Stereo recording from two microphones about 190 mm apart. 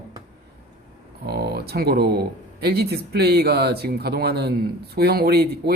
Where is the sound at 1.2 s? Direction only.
55° right (ahead or behind).